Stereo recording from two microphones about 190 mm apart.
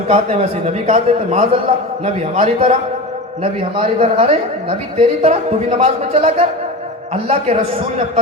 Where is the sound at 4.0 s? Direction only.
30° right (ahead or behind).